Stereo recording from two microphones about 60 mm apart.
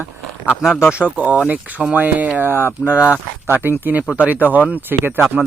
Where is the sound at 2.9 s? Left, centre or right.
Centre.